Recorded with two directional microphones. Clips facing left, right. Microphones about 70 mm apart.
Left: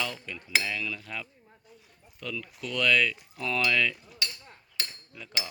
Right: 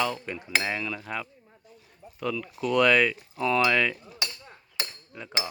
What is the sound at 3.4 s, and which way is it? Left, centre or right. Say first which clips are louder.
Speech: right 6 dB; centre.